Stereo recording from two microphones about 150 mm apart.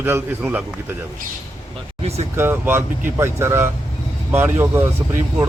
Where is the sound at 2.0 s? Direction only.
45° right (ahead or behind).